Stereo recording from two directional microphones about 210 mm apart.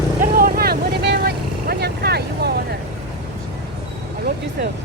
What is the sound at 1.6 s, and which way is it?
Speech, 50° right (ahead or behind).